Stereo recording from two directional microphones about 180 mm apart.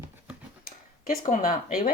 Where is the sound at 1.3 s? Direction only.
50° left (ahead or behind).